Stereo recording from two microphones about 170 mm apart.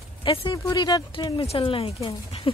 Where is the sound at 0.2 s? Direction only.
30° left (ahead or behind).